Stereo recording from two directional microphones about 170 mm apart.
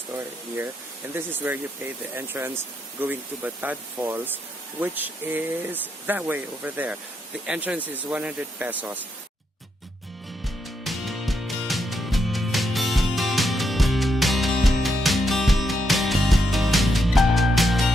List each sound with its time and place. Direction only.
1.1 s speech: 10° right (ahead or behind)
10.4 s music: centre (ahead or behind)